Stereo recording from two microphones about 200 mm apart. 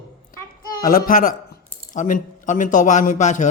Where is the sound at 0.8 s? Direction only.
45° left (ahead or behind).